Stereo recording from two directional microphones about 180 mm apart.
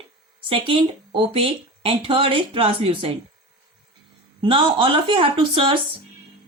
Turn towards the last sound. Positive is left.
turn(degrees=-30)  # may be behind; listen again after turning